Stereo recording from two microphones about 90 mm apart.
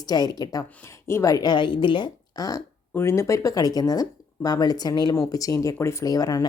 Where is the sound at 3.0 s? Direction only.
30° left (ahead or behind).